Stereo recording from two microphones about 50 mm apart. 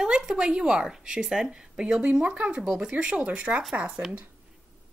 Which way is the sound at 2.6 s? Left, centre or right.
Centre.